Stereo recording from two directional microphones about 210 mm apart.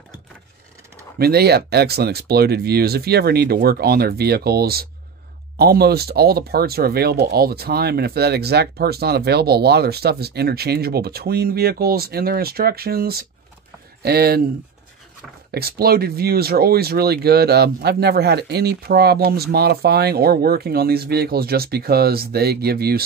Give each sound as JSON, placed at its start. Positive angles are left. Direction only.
{"t": 1.1, "sound": "speech", "side_deg": -50}
{"t": 15.5, "sound": "speech", "side_deg": -45}